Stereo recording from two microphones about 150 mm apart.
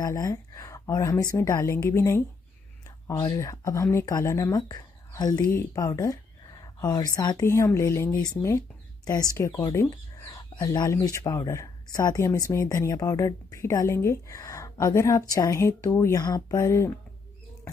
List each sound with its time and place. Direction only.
0.0 s speech: 20° left (ahead or behind)